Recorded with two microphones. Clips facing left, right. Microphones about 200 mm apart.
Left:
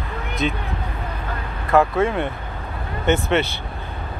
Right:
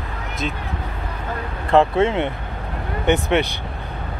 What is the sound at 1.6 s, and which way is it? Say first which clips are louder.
Speech: right 2 dB; 25° right (ahead or behind).